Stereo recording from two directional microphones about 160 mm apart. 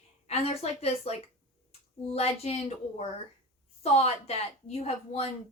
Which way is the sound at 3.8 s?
40° left (ahead or behind).